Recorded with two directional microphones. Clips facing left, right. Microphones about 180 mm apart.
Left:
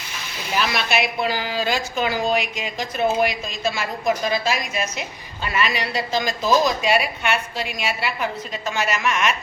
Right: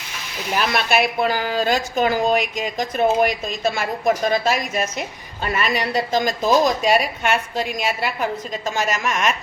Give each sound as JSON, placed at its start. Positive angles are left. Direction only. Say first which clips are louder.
{"t": 0.7, "sound": "a woman's voice", "louder": "right 3 dB", "side_deg": -50}